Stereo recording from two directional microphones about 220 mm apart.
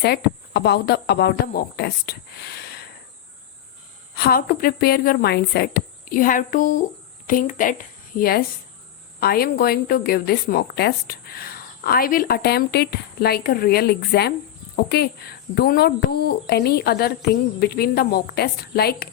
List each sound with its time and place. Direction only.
0.0 s speech: 50° left (ahead or behind)
4.1 s a woman's voice: 45° left (ahead or behind)